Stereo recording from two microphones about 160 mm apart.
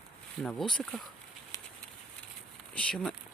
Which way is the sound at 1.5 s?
20° left (ahead or behind).